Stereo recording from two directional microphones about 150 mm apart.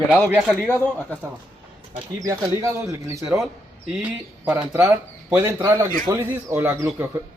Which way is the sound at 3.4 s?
10° right (ahead or behind).